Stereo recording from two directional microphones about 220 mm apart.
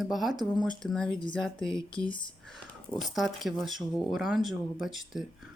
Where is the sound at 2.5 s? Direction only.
Centre (ahead or behind).